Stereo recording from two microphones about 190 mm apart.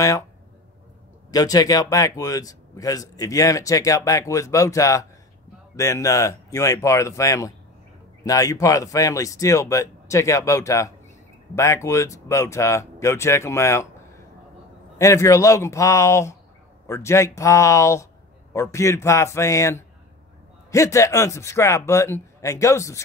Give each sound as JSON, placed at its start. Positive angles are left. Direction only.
{"t": 1.3, "sound": "a man's voice", "side_deg": 20}
{"t": 15.0, "sound": "a man's voice", "side_deg": 15}